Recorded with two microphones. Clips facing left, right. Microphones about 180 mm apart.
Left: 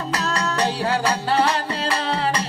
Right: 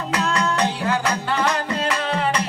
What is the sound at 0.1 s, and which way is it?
Music, 35° left (ahead or behind).